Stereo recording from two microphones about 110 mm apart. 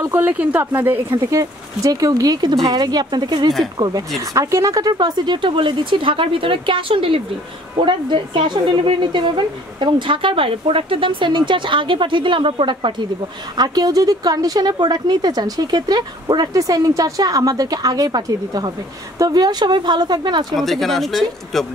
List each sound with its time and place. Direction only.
0.1 s speech: 15° right (ahead or behind)
1.3 s speech: 30° right (ahead or behind)
4.9 s speech: 45° right (ahead or behind)
13.6 s speech: 35° right (ahead or behind)
20.5 s speech: centre (ahead or behind)